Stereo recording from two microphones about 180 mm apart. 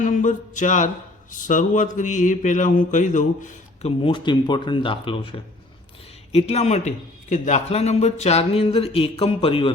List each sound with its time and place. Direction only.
0.0 s a sound: 45° left (ahead or behind)
1.3 s mantra: 45° left (ahead or behind)
4.0 s a man's voice: 25° left (ahead or behind)